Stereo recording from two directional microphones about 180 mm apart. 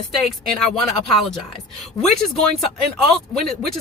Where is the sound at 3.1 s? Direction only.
Centre (ahead or behind).